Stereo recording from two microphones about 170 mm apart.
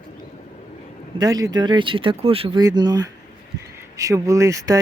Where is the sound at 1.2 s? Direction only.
20° right (ahead or behind).